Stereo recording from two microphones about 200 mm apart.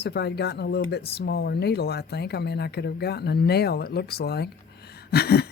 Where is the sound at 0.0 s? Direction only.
55° left (ahead or behind).